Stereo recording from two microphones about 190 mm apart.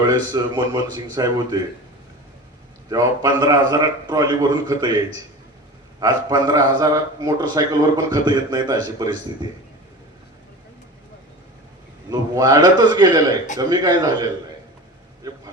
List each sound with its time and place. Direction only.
0.0 s a man's voice: 25° right (ahead or behind)
2.9 s a man's voice: 20° right (ahead or behind)
6.0 s a man's voice: 20° right (ahead or behind)
12.1 s a man's voice: 20° right (ahead or behind)
15.2 s vehicle: 20° right (ahead or behind)